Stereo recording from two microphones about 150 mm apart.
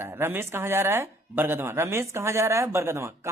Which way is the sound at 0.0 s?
15° right (ahead or behind).